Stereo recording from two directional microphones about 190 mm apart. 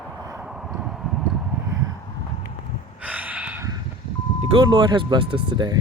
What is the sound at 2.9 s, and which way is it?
Gasp, 10° right (ahead or behind).